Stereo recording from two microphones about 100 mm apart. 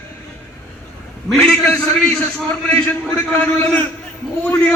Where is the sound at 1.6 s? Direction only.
20° left (ahead or behind).